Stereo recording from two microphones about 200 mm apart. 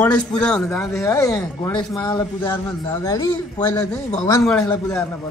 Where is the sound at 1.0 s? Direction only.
15° left (ahead or behind).